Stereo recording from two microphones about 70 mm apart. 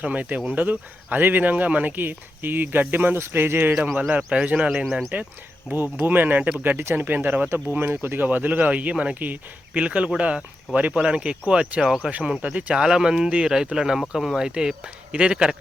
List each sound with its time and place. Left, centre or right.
0.0 s speech: right
3.8 s speech: centre
5.7 s speech: right